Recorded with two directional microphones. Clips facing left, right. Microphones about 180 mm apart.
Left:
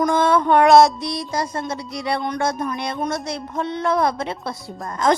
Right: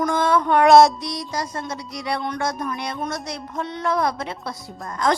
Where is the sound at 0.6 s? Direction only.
Centre (ahead or behind).